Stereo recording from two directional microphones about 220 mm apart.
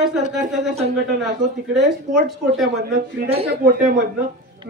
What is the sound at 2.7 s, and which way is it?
Speech, 45° right (ahead or behind).